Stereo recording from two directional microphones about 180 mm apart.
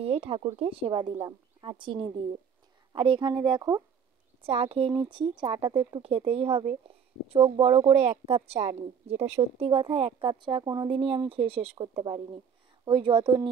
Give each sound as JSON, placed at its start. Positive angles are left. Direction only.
{"t": 0.0, "sound": "a woman's voice", "side_deg": -35}